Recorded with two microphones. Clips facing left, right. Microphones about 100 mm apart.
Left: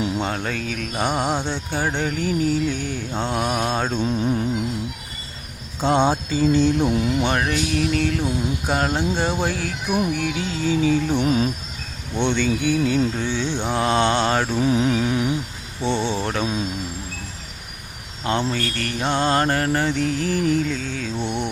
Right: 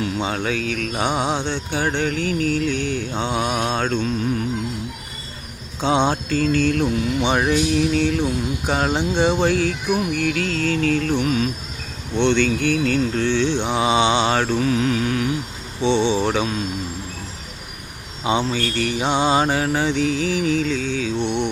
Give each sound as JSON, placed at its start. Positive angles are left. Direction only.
{"t": 0.2, "sound": "speech", "side_deg": 0}
{"t": 4.0, "sound": "music", "side_deg": 20}
{"t": 5.8, "sound": "music", "side_deg": 0}
{"t": 7.2, "sound": "speech", "side_deg": 0}
{"t": 10.0, "sound": "music", "side_deg": 15}
{"t": 11.2, "sound": "music", "side_deg": 30}
{"t": 12.1, "sound": "music", "side_deg": 10}
{"t": 13.7, "sound": "speech", "side_deg": -5}
{"t": 14.6, "sound": "music", "side_deg": 20}
{"t": 15.8, "sound": "speech", "side_deg": 5}
{"t": 18.2, "sound": "speech", "side_deg": -5}